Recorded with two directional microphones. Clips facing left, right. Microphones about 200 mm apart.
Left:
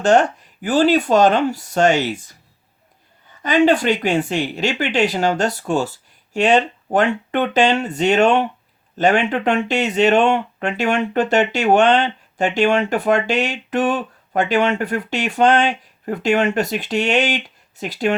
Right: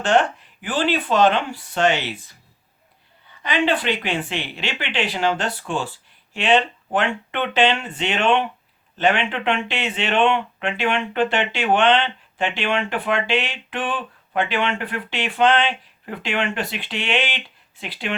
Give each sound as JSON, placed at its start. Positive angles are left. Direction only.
{"t": 0.0, "sound": "speech", "side_deg": 40}